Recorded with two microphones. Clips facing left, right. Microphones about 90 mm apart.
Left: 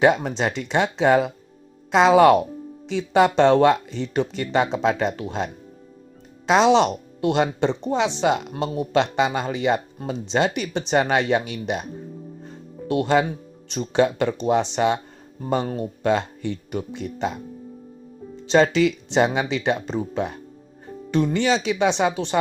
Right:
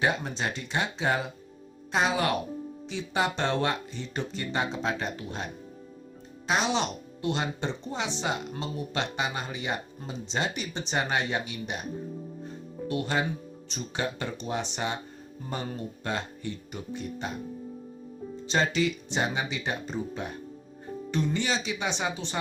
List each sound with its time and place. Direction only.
0.0 s speech: 90° left
6.6 s speech: 80° left
8.2 s speech: 70° left (ahead or behind)
12.9 s speech: 85° left
16.0 s speech: 90° left
18.5 s speech: 90° left
21.1 s speech: 60° left (ahead or behind)